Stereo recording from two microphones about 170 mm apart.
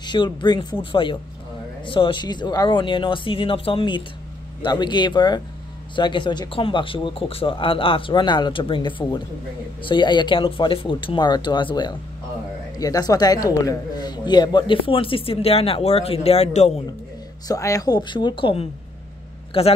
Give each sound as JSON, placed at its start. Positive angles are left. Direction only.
{"t": 0.0, "sound": "speech", "side_deg": 25}
{"t": 1.9, "sound": "speech", "side_deg": 30}
{"t": 17.5, "sound": "speech", "side_deg": 20}